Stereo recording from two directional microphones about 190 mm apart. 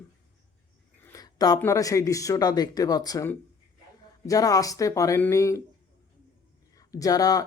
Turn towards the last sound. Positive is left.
turn(degrees=20)  # may be behind; listen again after turning